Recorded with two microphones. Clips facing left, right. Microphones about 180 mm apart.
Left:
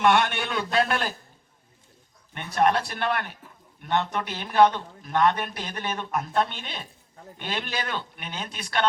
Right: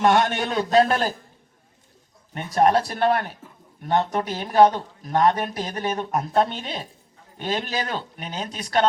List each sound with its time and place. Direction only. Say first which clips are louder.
0.0 s a man's voice: right 3 dB; 40° right (ahead or behind)
2.3 s a man's voice: right 4 dB; 40° right (ahead or behind)